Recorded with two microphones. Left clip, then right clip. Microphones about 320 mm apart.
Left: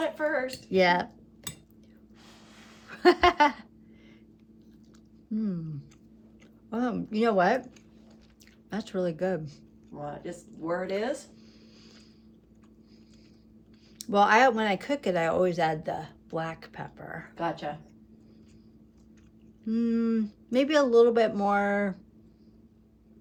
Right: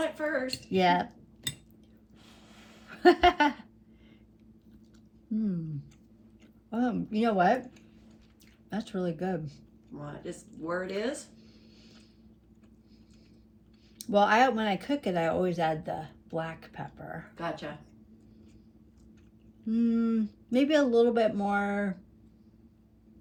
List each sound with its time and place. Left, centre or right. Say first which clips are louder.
0.2 s speech: left 3 dB; left
0.7 s speech: left 2 dB; centre
2.6 s a sound: even; centre
5.3 s speech: even; centre
8.7 s speech: left 3 dB; centre
10.0 s speech: left 4 dB; left
14.0 s speech: left 2 dB; centre
17.3 s speech: left 4 dB; left
19.6 s speech: left 1 dB; centre